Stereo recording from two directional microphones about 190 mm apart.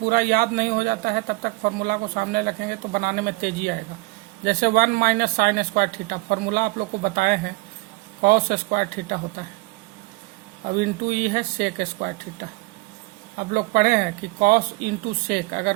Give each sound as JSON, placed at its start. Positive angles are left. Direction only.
{"t": 0.1, "sound": "a man's voice", "side_deg": -50}
{"t": 10.8, "sound": "a man's voice", "side_deg": -50}
{"t": 13.5, "sound": "a man's voice", "side_deg": -50}